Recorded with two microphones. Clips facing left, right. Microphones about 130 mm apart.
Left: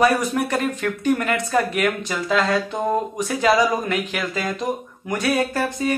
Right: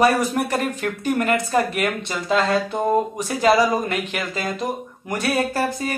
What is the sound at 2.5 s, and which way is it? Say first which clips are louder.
Speech: right 2 dB; centre (ahead or behind).